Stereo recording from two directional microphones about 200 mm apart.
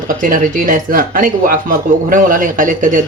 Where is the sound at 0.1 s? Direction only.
40° right (ahead or behind).